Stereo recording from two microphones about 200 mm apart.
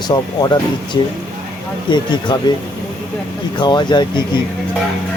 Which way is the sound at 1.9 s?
20° left (ahead or behind).